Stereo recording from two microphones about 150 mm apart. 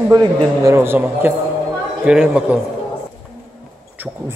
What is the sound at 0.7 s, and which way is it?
Speech, 15° right (ahead or behind).